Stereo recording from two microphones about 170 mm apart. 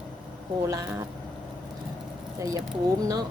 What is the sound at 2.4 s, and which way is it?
Speech, 20° right (ahead or behind).